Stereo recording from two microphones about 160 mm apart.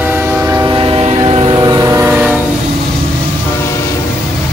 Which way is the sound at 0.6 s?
35° right (ahead or behind).